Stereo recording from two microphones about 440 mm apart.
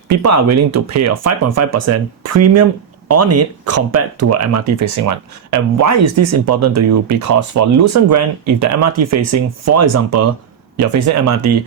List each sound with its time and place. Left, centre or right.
0.2 s speech: right